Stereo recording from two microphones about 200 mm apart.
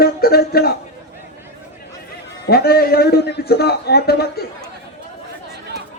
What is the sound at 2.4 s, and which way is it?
A man's voice, 50° left (ahead or behind).